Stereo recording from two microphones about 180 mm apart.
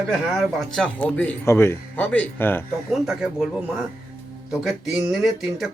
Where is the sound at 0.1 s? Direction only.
Centre (ahead or behind).